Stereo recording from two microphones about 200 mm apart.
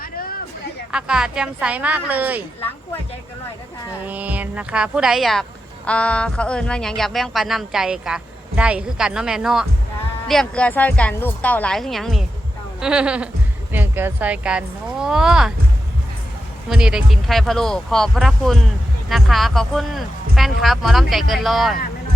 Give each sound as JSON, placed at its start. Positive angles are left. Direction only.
{"t": 0.0, "sound": "a sound", "side_deg": 45}
{"t": 0.9, "sound": "speech", "side_deg": -5}
{"t": 4.0, "sound": "speech", "side_deg": -5}
{"t": 16.6, "sound": "speech", "side_deg": -5}